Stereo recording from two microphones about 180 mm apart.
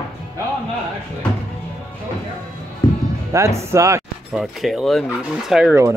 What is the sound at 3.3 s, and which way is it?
Speech, 15° right (ahead or behind).